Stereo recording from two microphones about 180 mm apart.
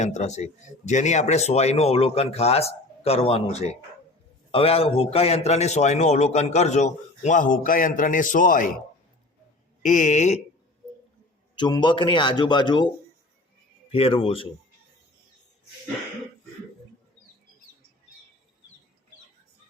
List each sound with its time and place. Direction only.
0.0 s speech: 40° left (ahead or behind)
9.8 s speech: 40° left (ahead or behind)
11.5 s a man's voice: 25° left (ahead or behind)
13.9 s speech: 30° left (ahead or behind)